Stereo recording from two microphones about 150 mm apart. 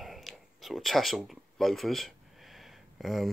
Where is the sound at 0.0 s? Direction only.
Centre (ahead or behind).